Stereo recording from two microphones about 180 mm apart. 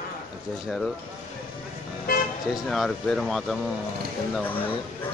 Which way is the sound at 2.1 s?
55° left (ahead or behind).